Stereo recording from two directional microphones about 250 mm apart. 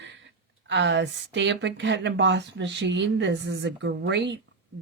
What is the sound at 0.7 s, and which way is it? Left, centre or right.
Speech, right.